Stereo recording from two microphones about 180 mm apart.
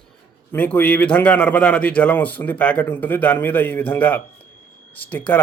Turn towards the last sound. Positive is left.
turn(degrees=10)  # may be behind; listen again after turning